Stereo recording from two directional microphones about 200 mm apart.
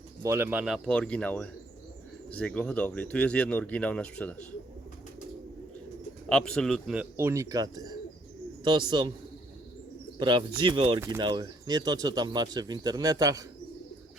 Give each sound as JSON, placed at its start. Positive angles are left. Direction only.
{"t": 0.2, "sound": "speech", "side_deg": -10}
{"t": 6.2, "sound": "speech", "side_deg": 5}
{"t": 10.2, "sound": "speech", "side_deg": -25}